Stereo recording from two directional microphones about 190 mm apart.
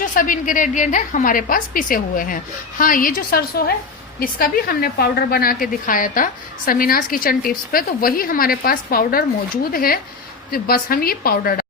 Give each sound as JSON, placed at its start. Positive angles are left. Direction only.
{"t": 0.0, "sound": "a woman's voice", "side_deg": 45}